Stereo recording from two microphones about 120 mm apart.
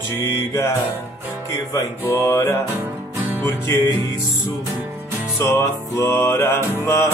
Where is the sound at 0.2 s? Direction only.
25° left (ahead or behind).